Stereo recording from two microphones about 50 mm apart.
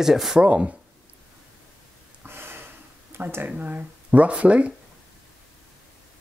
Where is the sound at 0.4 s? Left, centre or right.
Right.